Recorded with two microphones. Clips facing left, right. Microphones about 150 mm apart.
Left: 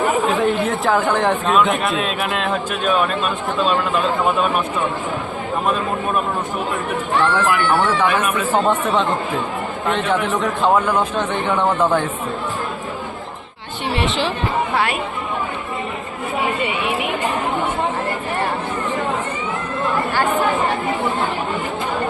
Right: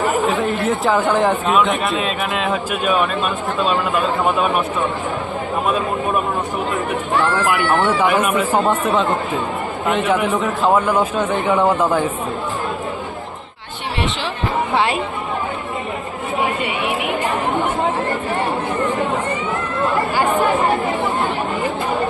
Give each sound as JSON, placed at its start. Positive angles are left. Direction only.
{"t": 0.1, "sound": "speech", "side_deg": 0}
{"t": 7.4, "sound": "a man's voice", "side_deg": -10}